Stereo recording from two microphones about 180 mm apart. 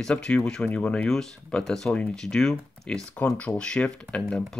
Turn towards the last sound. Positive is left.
turn(degrees=5)  # may be behind; listen again after turning